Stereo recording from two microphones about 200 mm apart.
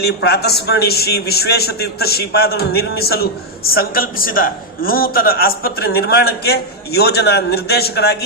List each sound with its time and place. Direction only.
0.0 s a man's voice: 55° left (ahead or behind)